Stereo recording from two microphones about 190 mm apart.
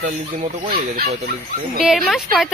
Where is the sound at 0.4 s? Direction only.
50° right (ahead or behind).